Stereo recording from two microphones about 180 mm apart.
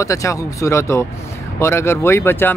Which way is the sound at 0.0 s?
15° left (ahead or behind).